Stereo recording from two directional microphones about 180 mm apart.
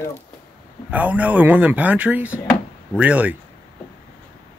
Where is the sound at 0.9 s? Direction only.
10° right (ahead or behind).